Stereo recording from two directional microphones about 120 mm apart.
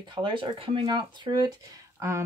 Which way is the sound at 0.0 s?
40° right (ahead or behind).